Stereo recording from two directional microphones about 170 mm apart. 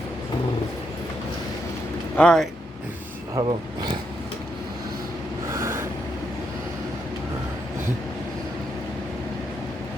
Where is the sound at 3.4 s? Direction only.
25° right (ahead or behind).